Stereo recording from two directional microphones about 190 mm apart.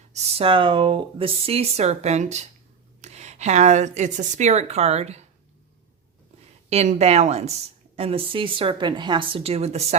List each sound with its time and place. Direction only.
0.1 s a woman's voice: 30° right (ahead or behind)
6.7 s a woman's voice: 35° right (ahead or behind)